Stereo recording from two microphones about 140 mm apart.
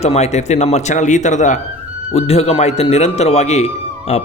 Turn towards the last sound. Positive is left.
turn(degrees=50)  # may be behind; listen again after turning